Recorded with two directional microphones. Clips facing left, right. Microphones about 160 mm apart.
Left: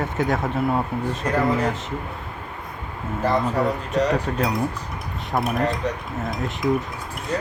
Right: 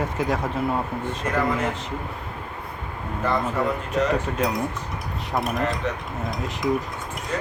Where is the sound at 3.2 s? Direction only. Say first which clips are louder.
Left 3 dB; 35° left (ahead or behind).